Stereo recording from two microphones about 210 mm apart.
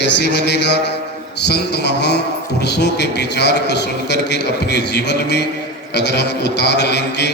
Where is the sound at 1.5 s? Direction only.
50° left (ahead or behind).